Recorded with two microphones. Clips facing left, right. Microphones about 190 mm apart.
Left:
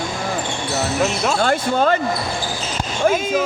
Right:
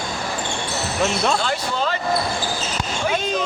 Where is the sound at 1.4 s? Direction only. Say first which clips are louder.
Left 6 dB; 50° left (ahead or behind).